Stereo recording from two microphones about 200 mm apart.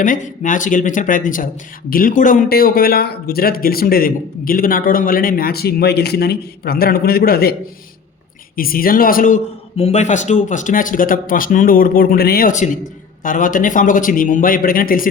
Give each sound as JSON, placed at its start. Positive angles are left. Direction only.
{"t": 0.0, "sound": "speech", "side_deg": 40}
{"t": 8.5, "sound": "speech", "side_deg": 45}